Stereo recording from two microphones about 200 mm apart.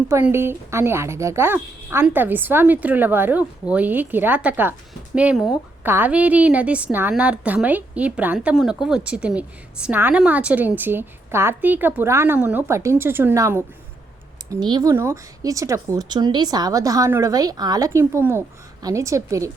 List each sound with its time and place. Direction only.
0.1 s a woman's voice: 10° right (ahead or behind)